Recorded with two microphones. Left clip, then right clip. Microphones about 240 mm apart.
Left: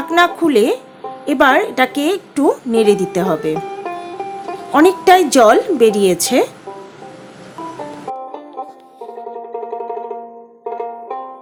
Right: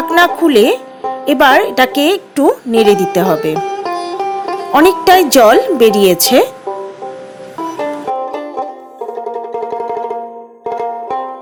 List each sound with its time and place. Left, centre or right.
0.2 s a woman's voice: centre
3.5 s music: right
4.7 s a woman's voice: centre
7.8 s music: right